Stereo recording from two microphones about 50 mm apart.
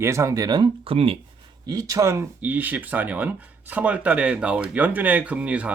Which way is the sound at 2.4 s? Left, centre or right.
Right.